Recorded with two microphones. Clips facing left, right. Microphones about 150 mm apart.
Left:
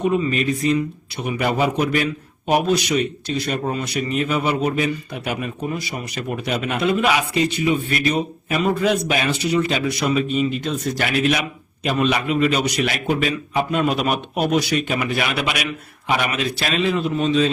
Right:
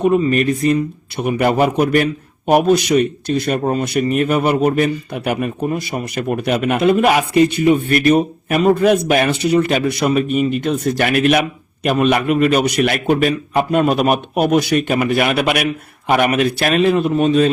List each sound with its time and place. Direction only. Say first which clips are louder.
0.3 s a man's voice: right 5 dB; 50° right (ahead or behind)